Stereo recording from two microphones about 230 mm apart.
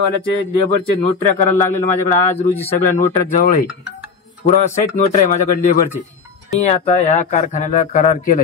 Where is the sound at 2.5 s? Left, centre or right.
Left.